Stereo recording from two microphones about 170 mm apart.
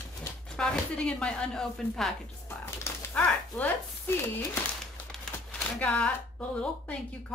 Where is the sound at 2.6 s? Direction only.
10° left (ahead or behind).